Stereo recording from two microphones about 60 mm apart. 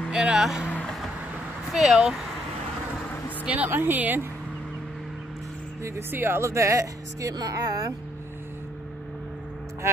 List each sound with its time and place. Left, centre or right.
0.1 s speech: centre
1.7 s speech: centre
3.4 s a woman's voice: right
3.7 s speech: right
5.9 s speech: right
6.4 s speech: right